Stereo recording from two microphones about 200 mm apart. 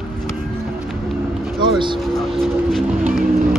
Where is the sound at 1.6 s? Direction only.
25° right (ahead or behind).